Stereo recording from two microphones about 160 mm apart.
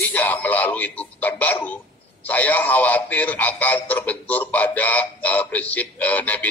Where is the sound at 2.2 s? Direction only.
10° left (ahead or behind).